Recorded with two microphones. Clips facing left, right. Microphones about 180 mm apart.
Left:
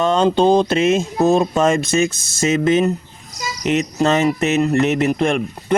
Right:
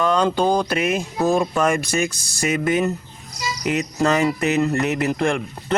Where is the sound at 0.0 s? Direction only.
25° left (ahead or behind).